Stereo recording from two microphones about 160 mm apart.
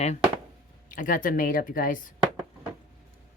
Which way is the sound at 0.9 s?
55° left (ahead or behind).